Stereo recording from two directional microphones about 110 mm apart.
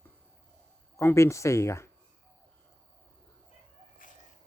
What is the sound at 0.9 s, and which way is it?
Speech, 25° left (ahead or behind).